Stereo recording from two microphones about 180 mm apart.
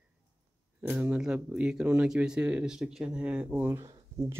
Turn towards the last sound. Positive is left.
turn(degrees=-15)  # may be behind; listen again after turning